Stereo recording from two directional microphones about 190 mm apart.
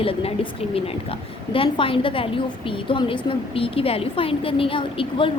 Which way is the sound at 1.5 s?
30° left (ahead or behind).